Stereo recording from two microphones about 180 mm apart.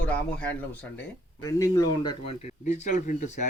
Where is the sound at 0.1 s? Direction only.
10° left (ahead or behind); by 2.3 s 25° left (ahead or behind).